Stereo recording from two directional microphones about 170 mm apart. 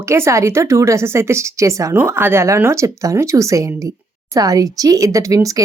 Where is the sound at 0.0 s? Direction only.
15° right (ahead or behind).